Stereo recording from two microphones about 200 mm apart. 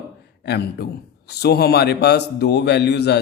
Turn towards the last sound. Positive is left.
turn(degrees=55)  # may be behind; listen again after turning